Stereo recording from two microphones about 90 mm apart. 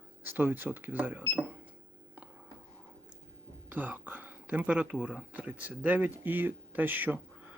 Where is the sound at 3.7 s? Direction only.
20° right (ahead or behind).